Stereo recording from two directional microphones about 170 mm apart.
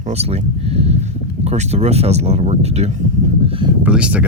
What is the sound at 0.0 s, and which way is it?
Speech, 40° right (ahead or behind).